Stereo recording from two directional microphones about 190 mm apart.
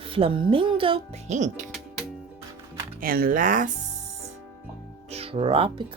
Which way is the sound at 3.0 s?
50° right (ahead or behind).